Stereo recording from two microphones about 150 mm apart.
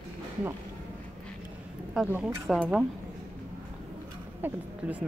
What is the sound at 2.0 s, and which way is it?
Speech, 5° right (ahead or behind).